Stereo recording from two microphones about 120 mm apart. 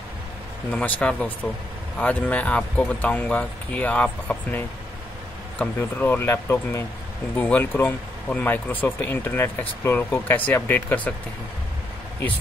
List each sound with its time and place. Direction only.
0.7 s speech: 10° left (ahead or behind)